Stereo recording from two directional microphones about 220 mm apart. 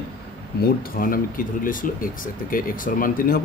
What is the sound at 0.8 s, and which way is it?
Speech, 40° left (ahead or behind).